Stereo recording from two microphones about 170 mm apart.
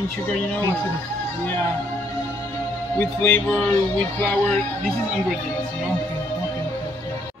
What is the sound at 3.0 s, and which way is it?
Speech, 10° left (ahead or behind).